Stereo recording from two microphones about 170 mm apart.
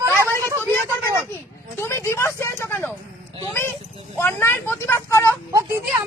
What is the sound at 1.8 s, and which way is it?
A woman's voice, 15° left (ahead or behind).